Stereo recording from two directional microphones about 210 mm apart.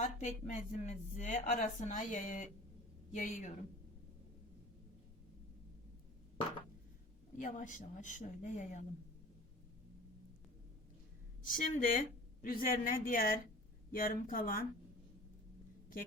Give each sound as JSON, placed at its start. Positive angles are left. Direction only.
{"t": 0.0, "sound": "speech", "side_deg": 35}
{"t": 7.3, "sound": "speech", "side_deg": 35}
{"t": 11.4, "sound": "speech", "side_deg": 40}